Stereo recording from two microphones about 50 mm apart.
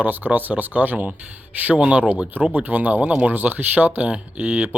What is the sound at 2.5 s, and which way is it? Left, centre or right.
Speech, right.